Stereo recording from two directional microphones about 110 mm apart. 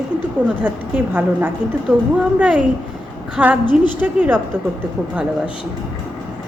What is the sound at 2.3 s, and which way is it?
A woman's voice, 10° right (ahead or behind).